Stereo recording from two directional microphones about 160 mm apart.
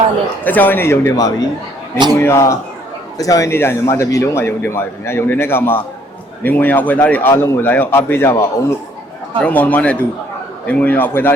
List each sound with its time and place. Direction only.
0.4 s a man's voice: 10° left (ahead or behind)